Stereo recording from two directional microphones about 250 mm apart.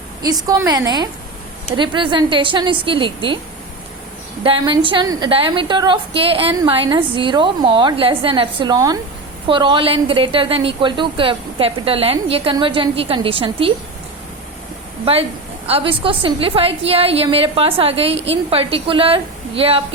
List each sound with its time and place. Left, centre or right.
0.4 s a woman's voice: centre
4.4 s a woman's voice: centre
15.0 s a woman's voice: right